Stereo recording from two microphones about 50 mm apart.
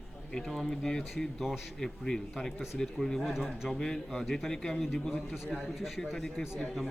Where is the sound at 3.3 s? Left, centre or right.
Centre.